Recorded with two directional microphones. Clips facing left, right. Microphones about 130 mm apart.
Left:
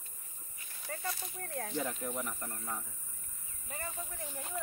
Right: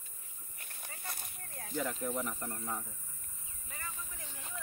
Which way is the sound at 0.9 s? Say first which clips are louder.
Left 15 dB; 50° left (ahead or behind).